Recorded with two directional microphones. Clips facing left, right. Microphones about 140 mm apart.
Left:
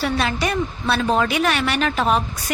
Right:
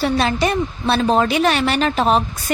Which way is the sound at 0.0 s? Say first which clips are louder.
Right 4 dB; 30° right (ahead or behind).